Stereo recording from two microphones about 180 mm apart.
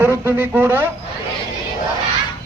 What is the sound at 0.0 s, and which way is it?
Speech, 10° right (ahead or behind).